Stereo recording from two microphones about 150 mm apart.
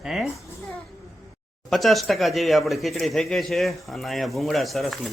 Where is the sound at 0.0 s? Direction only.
Centre (ahead or behind).